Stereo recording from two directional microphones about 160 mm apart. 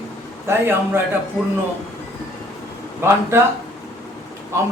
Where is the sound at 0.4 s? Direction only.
15° right (ahead or behind).